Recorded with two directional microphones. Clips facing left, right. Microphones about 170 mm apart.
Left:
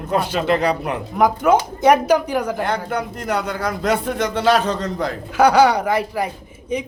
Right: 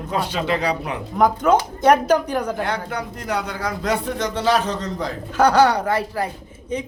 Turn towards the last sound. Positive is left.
turn(degrees=10)  # may be behind; listen again after turning